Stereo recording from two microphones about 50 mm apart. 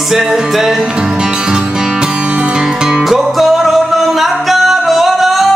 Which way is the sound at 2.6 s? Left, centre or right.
Centre.